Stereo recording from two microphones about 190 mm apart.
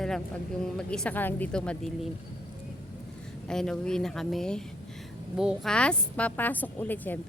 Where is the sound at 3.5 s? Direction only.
5° left (ahead or behind).